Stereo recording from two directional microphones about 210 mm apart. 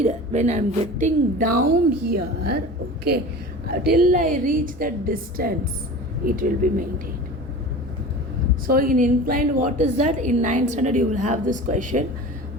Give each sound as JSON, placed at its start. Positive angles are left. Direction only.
{"t": 0.0, "sound": "a woman's voice", "side_deg": -30}
{"t": 8.6, "sound": "a woman's voice", "side_deg": -45}